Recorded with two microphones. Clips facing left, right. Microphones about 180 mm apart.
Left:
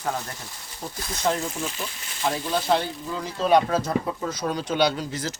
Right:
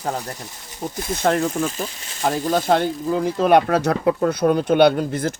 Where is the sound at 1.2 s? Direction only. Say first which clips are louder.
Right 6 dB; 60° right (ahead or behind).